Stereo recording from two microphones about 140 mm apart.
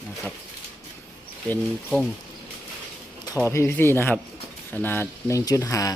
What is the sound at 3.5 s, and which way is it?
Speech, 20° left (ahead or behind).